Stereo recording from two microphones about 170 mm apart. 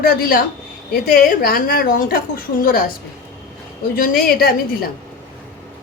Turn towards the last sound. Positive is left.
turn(degrees=60)  # may be behind; listen again after turning